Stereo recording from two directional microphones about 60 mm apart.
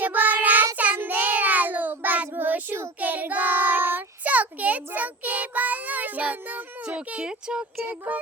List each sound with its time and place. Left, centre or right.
0.0 s child singing: right
6.8 s speech: centre
8.1 s music: right